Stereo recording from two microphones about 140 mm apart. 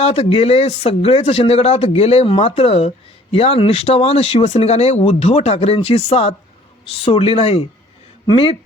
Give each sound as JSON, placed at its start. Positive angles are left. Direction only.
{"t": 0.0, "sound": "speech", "side_deg": 45}